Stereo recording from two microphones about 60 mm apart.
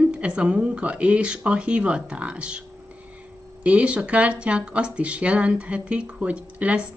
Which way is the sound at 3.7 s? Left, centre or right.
Right.